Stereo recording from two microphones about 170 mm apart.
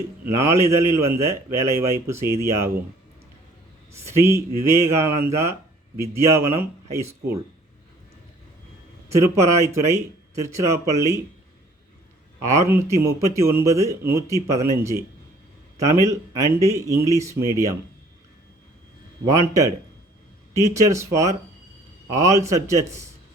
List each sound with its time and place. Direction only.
0.3 s a man's voice: 15° right (ahead or behind)
4.0 s a man's voice: 15° right (ahead or behind)
9.1 s a man's voice: 15° right (ahead or behind)
12.5 s a man's voice: 15° right (ahead or behind)
19.3 s a man's voice: 20° right (ahead or behind)